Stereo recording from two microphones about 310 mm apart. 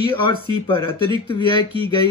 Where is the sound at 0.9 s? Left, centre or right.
Centre.